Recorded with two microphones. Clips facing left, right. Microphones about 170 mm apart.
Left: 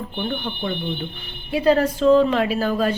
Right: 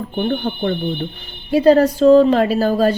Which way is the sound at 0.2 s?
45° right (ahead or behind).